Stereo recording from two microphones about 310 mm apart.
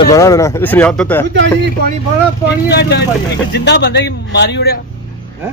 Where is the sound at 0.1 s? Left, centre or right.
Centre.